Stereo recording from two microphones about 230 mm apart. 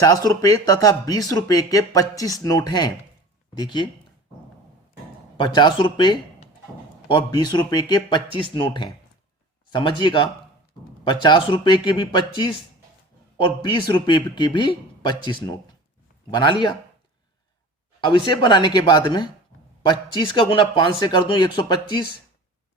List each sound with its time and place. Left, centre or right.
0.0 s speech: centre
5.4 s speech: left
18.0 s speech: centre